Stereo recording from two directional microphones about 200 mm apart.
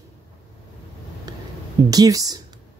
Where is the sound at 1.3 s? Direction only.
20° right (ahead or behind).